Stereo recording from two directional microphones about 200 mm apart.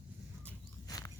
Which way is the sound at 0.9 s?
20° left (ahead or behind).